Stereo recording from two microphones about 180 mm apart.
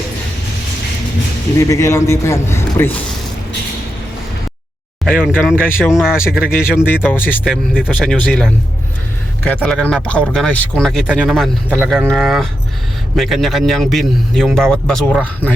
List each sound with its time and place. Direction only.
1.5 s a man's voice: 15° left (ahead or behind)
5.1 s speech: 5° right (ahead or behind)
7.0 s a man's voice: 10° left (ahead or behind)
7.4 s speech: 5° right (ahead or behind)